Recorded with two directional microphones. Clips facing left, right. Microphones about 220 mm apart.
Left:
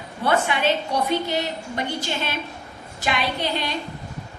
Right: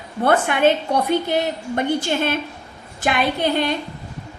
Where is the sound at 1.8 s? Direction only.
50° right (ahead or behind).